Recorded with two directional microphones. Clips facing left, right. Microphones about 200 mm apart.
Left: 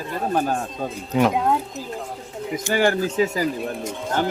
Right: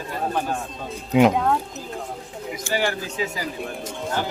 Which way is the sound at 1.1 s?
15° right (ahead or behind).